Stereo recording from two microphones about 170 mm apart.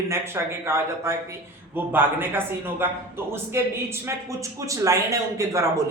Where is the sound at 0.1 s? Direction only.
15° right (ahead or behind).